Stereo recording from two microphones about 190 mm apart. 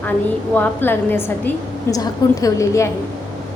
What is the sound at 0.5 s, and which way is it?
A woman's voice, 10° left (ahead or behind).